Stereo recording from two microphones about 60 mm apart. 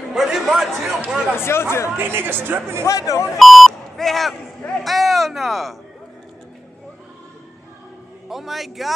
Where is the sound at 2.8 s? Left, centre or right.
Left.